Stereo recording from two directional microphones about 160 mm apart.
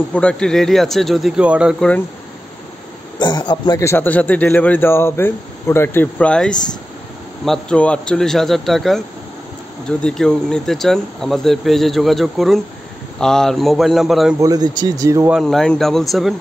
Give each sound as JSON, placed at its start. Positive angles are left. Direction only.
{"t": 0.1, "sound": "speech", "side_deg": 5}
{"t": 3.2, "sound": "a man's voice", "side_deg": 25}
{"t": 14.4, "sound": "speech", "side_deg": -25}
{"t": 15.3, "sound": "speech", "side_deg": 5}